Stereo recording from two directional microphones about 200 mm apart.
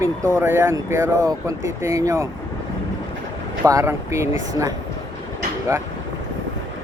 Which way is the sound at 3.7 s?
15° right (ahead or behind).